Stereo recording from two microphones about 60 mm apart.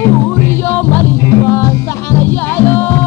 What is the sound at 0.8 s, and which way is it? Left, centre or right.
Music, left.